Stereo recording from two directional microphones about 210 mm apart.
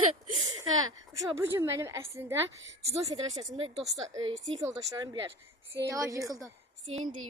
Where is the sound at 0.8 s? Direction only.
15° right (ahead or behind).